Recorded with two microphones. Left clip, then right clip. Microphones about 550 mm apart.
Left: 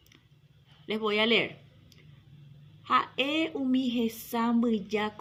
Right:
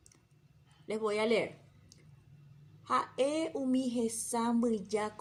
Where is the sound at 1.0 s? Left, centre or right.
Right.